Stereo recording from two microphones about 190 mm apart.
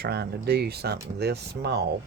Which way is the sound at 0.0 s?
60° right (ahead or behind).